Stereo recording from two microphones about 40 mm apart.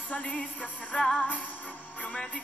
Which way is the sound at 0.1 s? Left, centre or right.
Left.